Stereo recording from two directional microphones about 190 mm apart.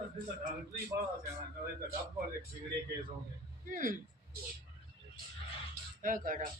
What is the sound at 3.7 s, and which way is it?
Speech, 45° right (ahead or behind).